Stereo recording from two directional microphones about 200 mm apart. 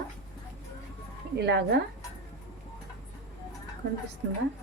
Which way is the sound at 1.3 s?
55° right (ahead or behind).